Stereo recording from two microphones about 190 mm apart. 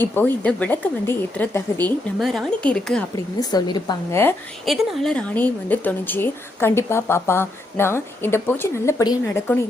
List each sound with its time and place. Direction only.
0.0 s a woman's voice: 10° left (ahead or behind)
3.5 s a woman's voice: 20° left (ahead or behind)
4.6 s a woman's voice: centre (ahead or behind)